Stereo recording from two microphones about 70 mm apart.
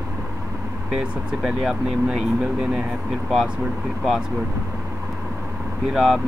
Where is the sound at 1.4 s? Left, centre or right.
Centre.